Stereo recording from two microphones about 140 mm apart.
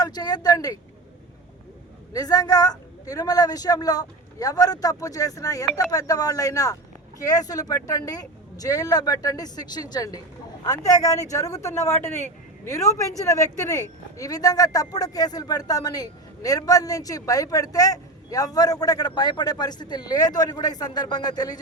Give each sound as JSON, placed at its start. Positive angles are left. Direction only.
{"t": 0.0, "sound": "speech", "side_deg": 30}
{"t": 2.1, "sound": "a man's voice", "side_deg": 30}